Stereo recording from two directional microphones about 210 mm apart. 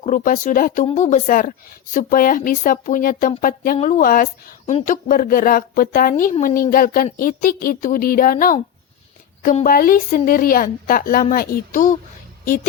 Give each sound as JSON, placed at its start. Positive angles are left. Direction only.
{"t": 0.0, "sound": "a woman's voice", "side_deg": 40}